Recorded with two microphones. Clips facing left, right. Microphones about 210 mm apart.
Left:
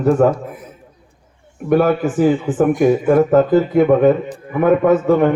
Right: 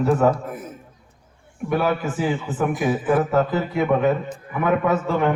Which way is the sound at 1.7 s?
50° left (ahead or behind).